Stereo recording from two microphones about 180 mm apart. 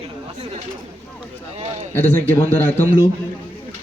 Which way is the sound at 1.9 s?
10° left (ahead or behind).